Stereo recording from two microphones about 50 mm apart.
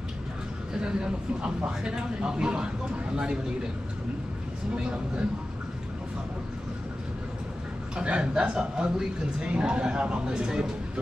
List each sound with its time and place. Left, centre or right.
0.7 s speech: centre
4.7 s speech: right
7.9 s speech: right